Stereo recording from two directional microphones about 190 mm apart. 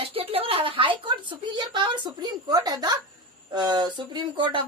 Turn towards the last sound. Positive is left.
turn(degrees=-25)  # may be behind; listen again after turning